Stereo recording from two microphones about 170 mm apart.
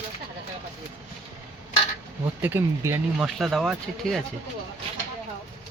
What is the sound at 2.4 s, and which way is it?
Speech, 15° right (ahead or behind).